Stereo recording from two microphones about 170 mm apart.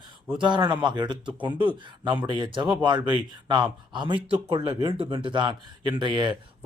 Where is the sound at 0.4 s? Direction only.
25° right (ahead or behind).